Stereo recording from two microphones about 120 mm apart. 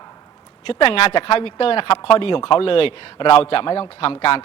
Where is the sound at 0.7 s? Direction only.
50° left (ahead or behind).